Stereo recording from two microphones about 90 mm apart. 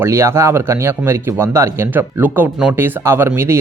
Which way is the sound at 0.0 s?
30° right (ahead or behind).